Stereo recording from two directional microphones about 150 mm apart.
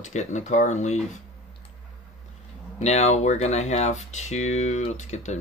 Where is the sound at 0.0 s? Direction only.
50° left (ahead or behind).